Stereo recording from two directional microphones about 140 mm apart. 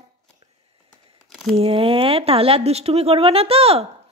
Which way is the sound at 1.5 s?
40° right (ahead or behind).